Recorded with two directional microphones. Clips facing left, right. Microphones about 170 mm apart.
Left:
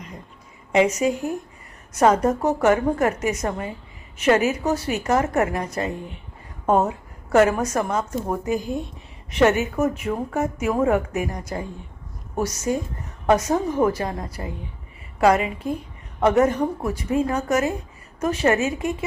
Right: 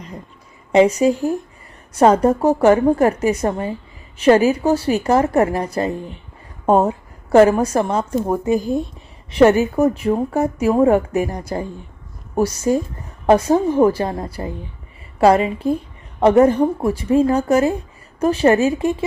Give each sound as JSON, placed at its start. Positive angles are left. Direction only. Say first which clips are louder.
{"t": 0.7, "sound": "speech", "louder": "right 6 dB", "side_deg": -30}